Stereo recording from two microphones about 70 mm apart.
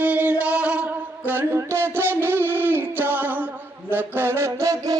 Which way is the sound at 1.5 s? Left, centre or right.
Right.